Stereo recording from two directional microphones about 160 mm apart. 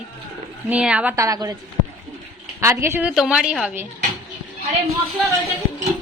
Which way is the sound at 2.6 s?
15° right (ahead or behind).